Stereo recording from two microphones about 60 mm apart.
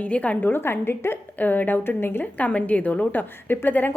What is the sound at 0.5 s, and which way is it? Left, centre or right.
Speech, left.